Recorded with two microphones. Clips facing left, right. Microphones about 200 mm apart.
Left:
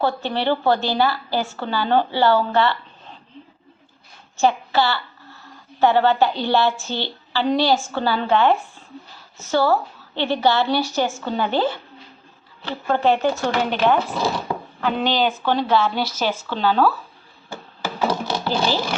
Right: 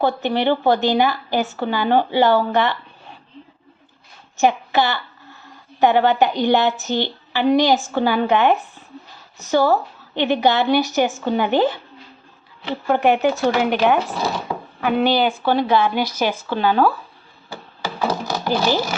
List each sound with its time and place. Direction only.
0.0 s a woman's voice: 15° right (ahead or behind)
4.4 s a woman's voice: 15° right (ahead or behind)
18.4 s a woman's voice: 15° right (ahead or behind)